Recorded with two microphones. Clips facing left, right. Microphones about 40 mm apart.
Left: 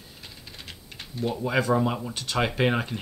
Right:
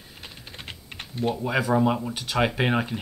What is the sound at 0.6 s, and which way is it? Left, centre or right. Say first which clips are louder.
Typing: right 3 dB; right.